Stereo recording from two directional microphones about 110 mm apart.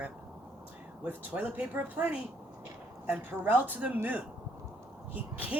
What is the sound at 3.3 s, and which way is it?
Speech, 15° right (ahead or behind).